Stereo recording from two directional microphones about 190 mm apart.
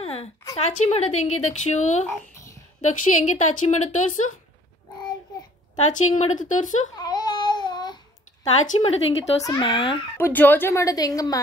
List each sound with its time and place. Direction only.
0.0 s a sound: 30° left (ahead or behind)
0.6 s speech: 35° left (ahead or behind)
5.8 s a woman's voice: 40° left (ahead or behind)
7.0 s babbling: 20° left (ahead or behind)
8.6 s speech: 35° left (ahead or behind)
10.1 s speech: 10° left (ahead or behind)